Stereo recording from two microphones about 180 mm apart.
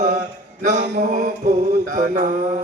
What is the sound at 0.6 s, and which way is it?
Mantra, 45° right (ahead or behind).